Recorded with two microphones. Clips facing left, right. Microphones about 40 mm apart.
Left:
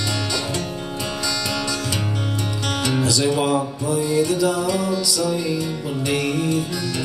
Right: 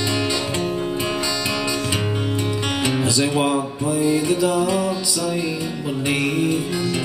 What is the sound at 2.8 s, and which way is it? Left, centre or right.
Music, right.